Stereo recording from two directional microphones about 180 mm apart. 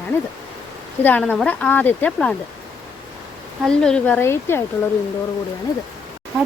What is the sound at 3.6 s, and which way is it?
Speech, 5° left (ahead or behind).